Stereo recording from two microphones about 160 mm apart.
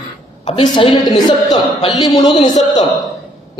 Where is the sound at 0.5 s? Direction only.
30° left (ahead or behind).